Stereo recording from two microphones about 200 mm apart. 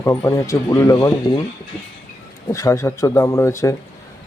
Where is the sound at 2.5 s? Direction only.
15° left (ahead or behind).